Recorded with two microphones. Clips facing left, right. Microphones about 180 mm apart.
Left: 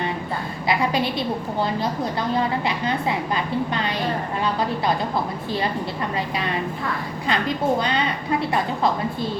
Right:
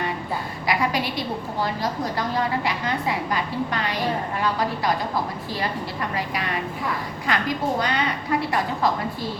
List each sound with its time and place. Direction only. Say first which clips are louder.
0.7 s a woman's voice: left 2 dB; 25° left (ahead or behind)
2.6 s a woman's voice: left 2 dB; 25° left (ahead or behind)
7.3 s a woman's voice: left 2 dB; 25° left (ahead or behind)